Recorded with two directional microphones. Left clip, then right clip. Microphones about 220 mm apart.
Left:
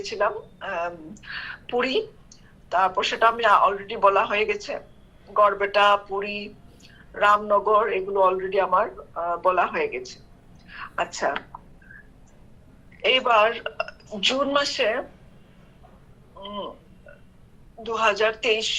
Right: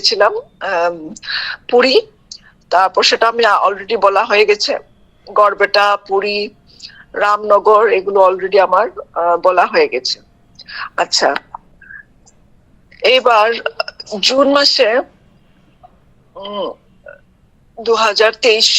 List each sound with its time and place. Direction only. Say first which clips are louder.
0.1 s speech: right 12 dB; 50° right (ahead or behind)
13.0 s speech: right 9 dB; 55° right (ahead or behind)
16.3 s a man's voice: right 12 dB; 50° right (ahead or behind)
17.8 s speech: right 10 dB; 55° right (ahead or behind)